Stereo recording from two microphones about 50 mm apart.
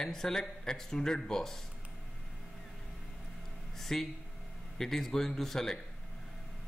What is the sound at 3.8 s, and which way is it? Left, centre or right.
A man's voice, centre.